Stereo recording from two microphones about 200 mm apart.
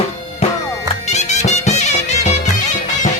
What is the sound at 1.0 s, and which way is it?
Music, 35° left (ahead or behind).